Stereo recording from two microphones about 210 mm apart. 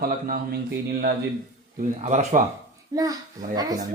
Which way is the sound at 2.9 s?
20° right (ahead or behind).